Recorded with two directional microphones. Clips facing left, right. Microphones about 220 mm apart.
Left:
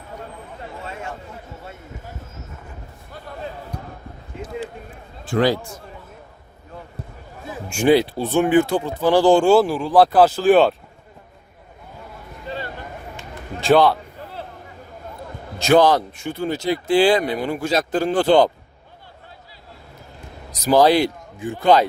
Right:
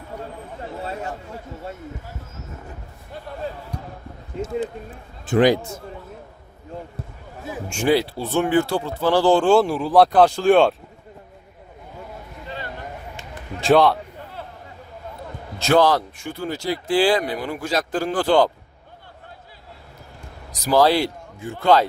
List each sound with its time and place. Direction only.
0.8 s a sound: 35° right (ahead or behind)
5.3 s speech: 20° right (ahead or behind)
7.7 s speech: 15° left (ahead or behind)
13.6 s speech: centre (ahead or behind)
15.5 s speech: 15° left (ahead or behind)
20.5 s speech: 20° left (ahead or behind)